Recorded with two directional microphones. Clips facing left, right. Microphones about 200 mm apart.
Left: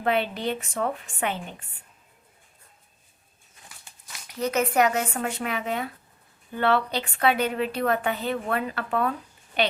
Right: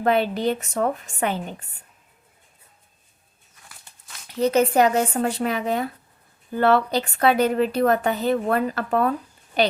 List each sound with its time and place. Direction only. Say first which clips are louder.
0.0 s a woman's voice: right 5 dB; 40° right (ahead or behind)
4.3 s a woman's voice: right 6 dB; 30° right (ahead or behind)